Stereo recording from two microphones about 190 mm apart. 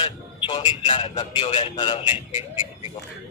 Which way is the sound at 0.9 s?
25° left (ahead or behind).